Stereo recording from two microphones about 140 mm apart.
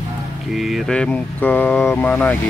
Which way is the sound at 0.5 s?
Centre (ahead or behind).